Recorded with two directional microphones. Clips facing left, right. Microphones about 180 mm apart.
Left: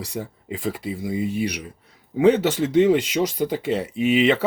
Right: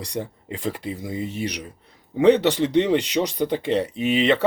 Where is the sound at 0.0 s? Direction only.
5° left (ahead or behind).